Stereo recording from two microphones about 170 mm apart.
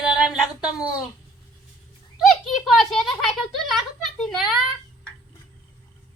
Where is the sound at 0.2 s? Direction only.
5° right (ahead or behind).